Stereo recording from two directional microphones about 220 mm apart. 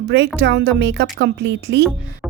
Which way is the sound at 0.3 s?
50° right (ahead or behind).